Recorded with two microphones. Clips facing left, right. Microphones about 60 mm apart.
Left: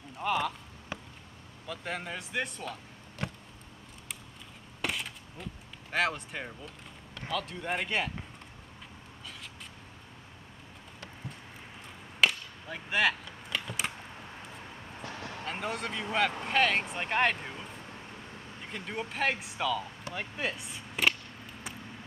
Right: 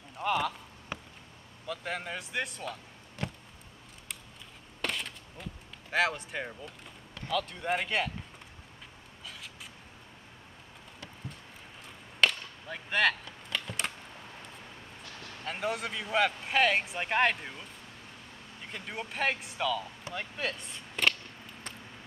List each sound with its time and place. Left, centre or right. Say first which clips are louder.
0.2 s speech: even; centre
1.7 s speech: right 1 dB; centre
4.8 s a sound: even; centre
7.2 s speech: right 2 dB; centre
12.2 s cap gun: even; centre
15.0 s a sound: left 8 dB; left
15.4 s speech: right 2 dB; centre
18.7 s speech: left 2 dB; centre